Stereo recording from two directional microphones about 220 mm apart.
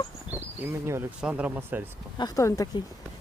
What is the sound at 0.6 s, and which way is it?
Speech, 10° right (ahead or behind).